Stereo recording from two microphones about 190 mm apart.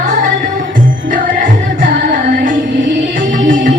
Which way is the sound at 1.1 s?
45° right (ahead or behind).